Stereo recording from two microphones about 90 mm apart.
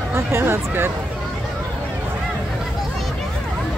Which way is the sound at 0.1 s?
30° right (ahead or behind).